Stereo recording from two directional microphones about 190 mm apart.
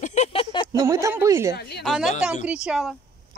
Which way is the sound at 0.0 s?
35° left (ahead or behind).